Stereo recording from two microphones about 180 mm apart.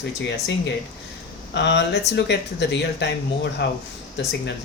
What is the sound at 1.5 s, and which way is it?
Speech, 75° left (ahead or behind).